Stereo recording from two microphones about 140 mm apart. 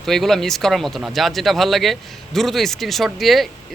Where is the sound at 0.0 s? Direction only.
Centre (ahead or behind).